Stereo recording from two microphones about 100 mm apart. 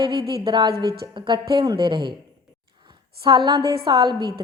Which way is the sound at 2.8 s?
50° right (ahead or behind).